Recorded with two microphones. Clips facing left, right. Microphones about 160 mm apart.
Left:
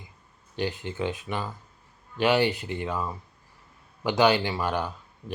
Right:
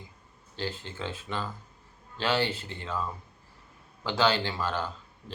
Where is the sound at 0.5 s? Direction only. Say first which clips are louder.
Left 5 dB; 15° left (ahead or behind).